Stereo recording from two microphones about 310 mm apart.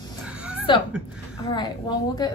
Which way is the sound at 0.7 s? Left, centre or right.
Centre.